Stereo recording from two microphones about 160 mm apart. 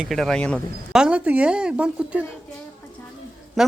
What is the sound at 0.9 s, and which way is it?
A woman's voice, 5° right (ahead or behind).